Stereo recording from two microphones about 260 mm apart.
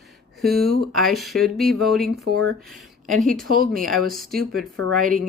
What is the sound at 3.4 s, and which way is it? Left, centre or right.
Speech, right.